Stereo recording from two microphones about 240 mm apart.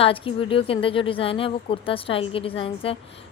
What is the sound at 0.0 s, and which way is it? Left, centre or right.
A woman's voice, left.